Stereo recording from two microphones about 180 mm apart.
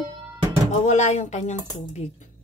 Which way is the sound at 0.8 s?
40° left (ahead or behind).